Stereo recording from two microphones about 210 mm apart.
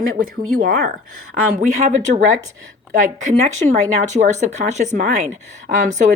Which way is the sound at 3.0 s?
35° right (ahead or behind).